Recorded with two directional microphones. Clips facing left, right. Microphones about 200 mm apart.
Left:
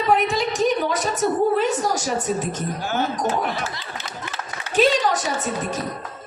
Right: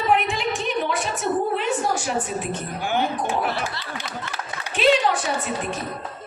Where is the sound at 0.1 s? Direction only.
40° left (ahead or behind).